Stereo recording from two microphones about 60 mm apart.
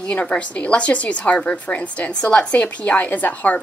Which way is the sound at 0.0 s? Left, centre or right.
Left.